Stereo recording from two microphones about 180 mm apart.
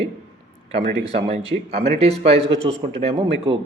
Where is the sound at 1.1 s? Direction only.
35° right (ahead or behind).